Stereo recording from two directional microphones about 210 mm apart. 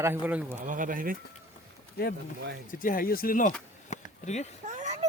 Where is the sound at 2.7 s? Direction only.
40° left (ahead or behind).